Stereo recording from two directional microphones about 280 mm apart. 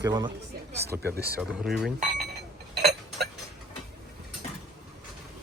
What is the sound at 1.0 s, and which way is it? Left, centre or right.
Speech, right.